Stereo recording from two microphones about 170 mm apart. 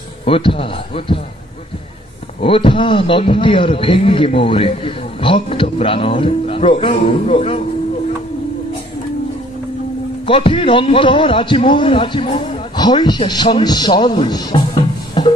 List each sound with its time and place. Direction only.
0.2 s a man's voice: 30° left (ahead or behind)
2.4 s a man's voice: 30° left (ahead or behind)
10.2 s a man's voice: 30° left (ahead or behind)
14.7 s music: 30° left (ahead or behind)